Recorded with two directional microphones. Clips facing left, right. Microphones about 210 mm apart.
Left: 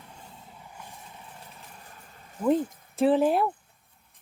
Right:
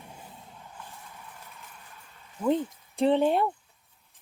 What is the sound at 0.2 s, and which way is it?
Vehicle, 5° right (ahead or behind).